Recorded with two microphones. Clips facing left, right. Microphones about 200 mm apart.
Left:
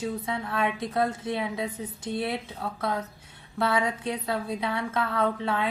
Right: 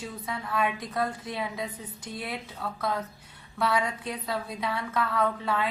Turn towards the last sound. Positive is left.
turn(degrees=25)  # may be behind; listen again after turning